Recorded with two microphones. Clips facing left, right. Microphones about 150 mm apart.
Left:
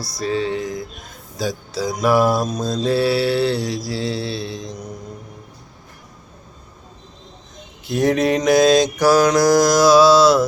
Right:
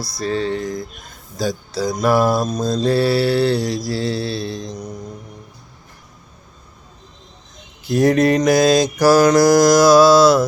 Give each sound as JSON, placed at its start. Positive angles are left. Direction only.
{"t": 0.2, "sound": "music", "side_deg": 5}
{"t": 1.4, "sound": "mantra", "side_deg": 5}
{"t": 7.9, "sound": "mantra", "side_deg": 0}